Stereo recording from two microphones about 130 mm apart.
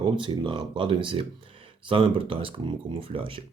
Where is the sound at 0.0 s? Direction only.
40° right (ahead or behind).